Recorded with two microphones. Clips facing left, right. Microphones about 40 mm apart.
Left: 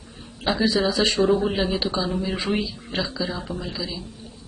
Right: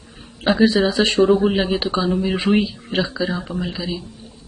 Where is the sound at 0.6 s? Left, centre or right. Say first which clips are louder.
Right 5 dB; right.